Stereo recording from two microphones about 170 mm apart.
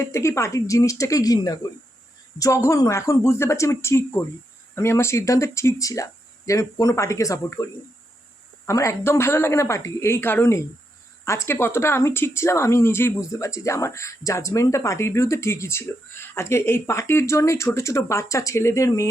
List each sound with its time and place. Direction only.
0.0 s speech: 15° left (ahead or behind)